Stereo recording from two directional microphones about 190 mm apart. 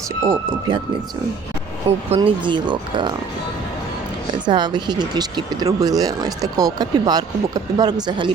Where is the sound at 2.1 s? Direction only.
30° right (ahead or behind).